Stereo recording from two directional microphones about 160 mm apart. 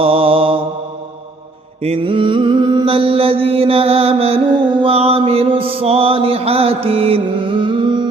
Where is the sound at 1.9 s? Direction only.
30° right (ahead or behind).